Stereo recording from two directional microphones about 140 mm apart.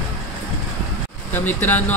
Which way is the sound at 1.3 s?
15° left (ahead or behind).